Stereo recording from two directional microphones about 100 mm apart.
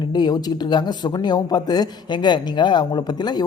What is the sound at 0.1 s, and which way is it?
Speech, 45° left (ahead or behind).